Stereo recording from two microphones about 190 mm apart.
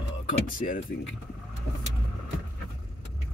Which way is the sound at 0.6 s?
40° left (ahead or behind).